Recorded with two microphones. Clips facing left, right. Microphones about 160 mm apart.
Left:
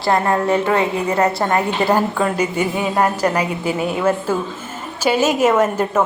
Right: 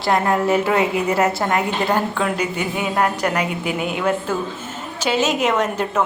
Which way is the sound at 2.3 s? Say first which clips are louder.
Left 4 dB; 50° left (ahead or behind).